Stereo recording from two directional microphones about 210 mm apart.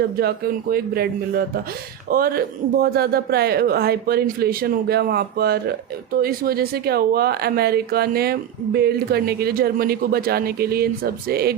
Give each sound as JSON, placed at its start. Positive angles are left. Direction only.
{"t": 0.0, "sound": "speech", "side_deg": -50}